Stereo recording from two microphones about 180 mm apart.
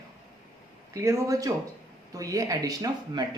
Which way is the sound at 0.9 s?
15° right (ahead or behind).